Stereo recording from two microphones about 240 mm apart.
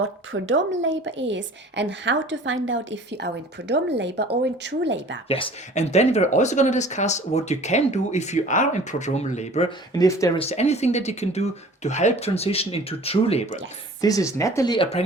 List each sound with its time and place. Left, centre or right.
0.0 s a woman's voice: right
5.3 s speech: left
9.9 s speech: centre
10.4 s speech: left
14.0 s speech: centre